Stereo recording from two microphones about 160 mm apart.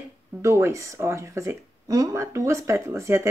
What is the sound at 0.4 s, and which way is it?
Speech, 15° right (ahead or behind).